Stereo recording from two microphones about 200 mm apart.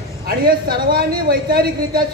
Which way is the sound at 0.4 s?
45° right (ahead or behind).